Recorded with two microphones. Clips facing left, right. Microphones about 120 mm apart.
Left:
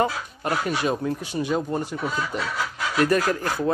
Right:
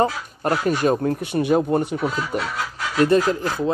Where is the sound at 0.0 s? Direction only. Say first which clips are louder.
Right 3 dB; 40° right (ahead or behind); by 2.4 s 60° right (ahead or behind).